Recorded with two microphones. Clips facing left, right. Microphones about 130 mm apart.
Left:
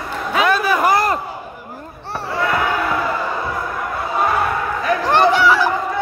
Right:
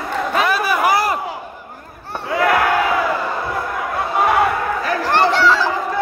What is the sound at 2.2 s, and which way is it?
Basketball bounce, 85° right.